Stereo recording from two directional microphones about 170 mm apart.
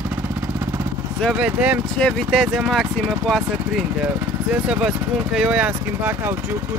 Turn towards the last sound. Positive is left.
turn(degrees=-5)  # may be behind; listen again after turning